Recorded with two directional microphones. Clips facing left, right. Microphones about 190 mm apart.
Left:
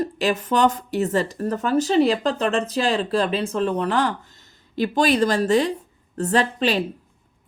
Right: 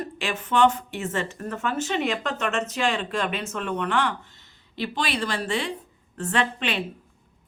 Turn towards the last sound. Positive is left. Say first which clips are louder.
# left 6 dB
turn(degrees=35)  # may be behind; listen again after turning